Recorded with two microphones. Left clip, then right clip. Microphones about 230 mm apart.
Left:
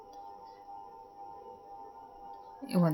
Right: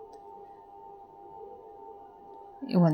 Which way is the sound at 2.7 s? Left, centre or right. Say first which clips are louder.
Right 4 dB; centre.